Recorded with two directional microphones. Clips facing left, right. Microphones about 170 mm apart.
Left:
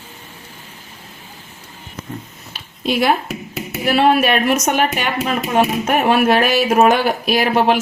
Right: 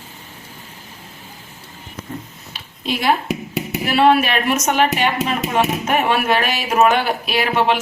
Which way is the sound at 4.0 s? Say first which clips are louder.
Even; 45° left (ahead or behind).